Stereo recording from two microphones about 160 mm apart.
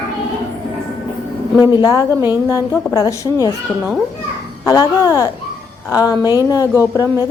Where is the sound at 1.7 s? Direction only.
25° left (ahead or behind).